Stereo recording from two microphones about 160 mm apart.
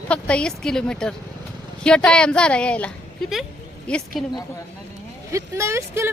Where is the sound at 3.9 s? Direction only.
5° left (ahead or behind).